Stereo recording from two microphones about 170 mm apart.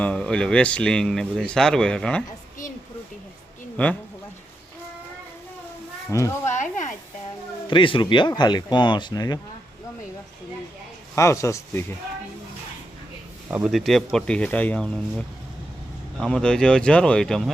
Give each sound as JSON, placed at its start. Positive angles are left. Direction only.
{"t": 0.0, "sound": "speech", "side_deg": 5}
{"t": 3.8, "sound": "speech", "side_deg": 10}
{"t": 6.1, "sound": "speech", "side_deg": 20}
{"t": 7.7, "sound": "speech", "side_deg": 30}
{"t": 11.1, "sound": "speech", "side_deg": 15}
{"t": 13.5, "sound": "speech", "side_deg": -5}